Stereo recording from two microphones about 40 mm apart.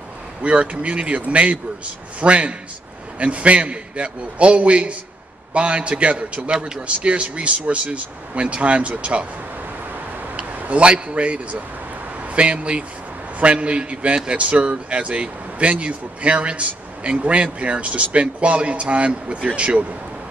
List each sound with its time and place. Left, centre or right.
0.4 s a man's voice: right
6.5 s speech: centre
7.1 s a man's voice: right
10.3 s a man's voice: right